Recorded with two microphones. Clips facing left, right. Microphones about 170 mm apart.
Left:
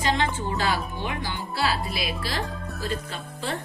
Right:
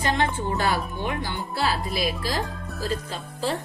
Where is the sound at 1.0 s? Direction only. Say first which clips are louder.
Right 2 dB; 45° right (ahead or behind).